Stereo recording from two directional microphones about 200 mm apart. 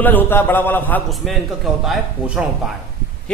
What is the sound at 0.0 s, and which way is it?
A man's voice, 10° left (ahead or behind).